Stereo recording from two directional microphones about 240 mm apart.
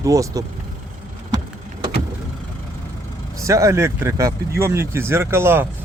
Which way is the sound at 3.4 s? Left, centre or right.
Centre.